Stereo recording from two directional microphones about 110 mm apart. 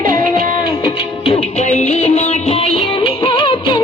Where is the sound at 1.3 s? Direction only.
80° left.